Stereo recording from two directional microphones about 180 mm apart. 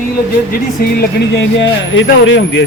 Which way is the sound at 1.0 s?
80° left.